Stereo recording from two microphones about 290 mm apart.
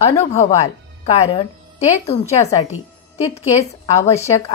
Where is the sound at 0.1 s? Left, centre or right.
Left.